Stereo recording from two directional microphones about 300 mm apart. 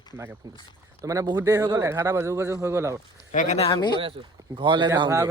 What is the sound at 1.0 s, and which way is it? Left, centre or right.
Speech, centre.